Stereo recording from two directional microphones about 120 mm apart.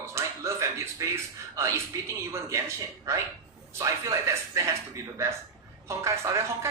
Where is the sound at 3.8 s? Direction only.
25° right (ahead or behind).